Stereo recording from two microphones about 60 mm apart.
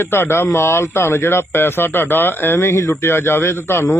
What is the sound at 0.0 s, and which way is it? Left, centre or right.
Speech, left.